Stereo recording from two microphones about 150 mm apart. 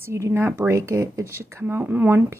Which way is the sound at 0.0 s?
15° right (ahead or behind).